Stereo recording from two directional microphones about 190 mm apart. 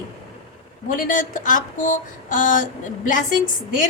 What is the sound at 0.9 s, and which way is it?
A woman's voice, 45° left (ahead or behind).